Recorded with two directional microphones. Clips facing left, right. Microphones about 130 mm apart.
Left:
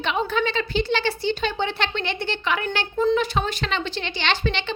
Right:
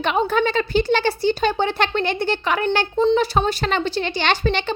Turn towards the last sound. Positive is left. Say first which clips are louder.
# right 4 dB
turn(degrees=-45)  # may be behind; listen again after turning